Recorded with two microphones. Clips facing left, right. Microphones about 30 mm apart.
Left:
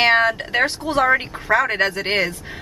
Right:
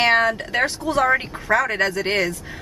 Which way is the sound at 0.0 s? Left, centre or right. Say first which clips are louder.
Left 1 dB; centre.